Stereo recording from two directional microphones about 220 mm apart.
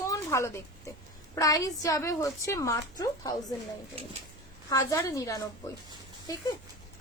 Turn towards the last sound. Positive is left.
turn(degrees=15)  # may be behind; listen again after turning